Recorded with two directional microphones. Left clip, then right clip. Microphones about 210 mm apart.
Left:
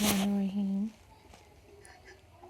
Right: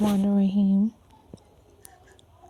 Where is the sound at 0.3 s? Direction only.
50° right (ahead or behind).